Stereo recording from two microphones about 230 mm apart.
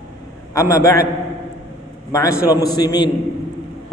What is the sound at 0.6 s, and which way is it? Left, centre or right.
Speech, centre.